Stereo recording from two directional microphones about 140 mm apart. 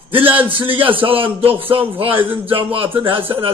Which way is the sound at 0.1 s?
40° right (ahead or behind).